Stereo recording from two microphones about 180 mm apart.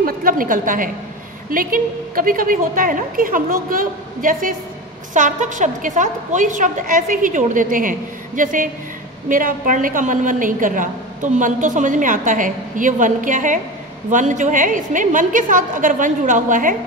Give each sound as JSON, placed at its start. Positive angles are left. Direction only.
{"t": 0.0, "sound": "a woman's voice", "side_deg": -50}